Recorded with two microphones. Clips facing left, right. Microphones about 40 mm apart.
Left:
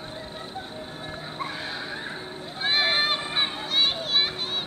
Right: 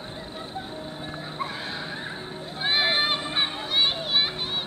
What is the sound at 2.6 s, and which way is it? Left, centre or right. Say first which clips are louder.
Children playing: even; centre.